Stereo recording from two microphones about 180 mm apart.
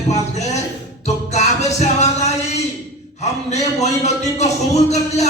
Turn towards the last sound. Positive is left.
turn(degrees=40)  # may be behind; listen again after turning